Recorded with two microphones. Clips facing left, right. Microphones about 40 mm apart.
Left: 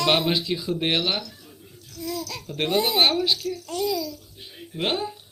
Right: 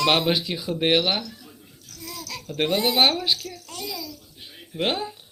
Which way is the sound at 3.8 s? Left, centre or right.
Right.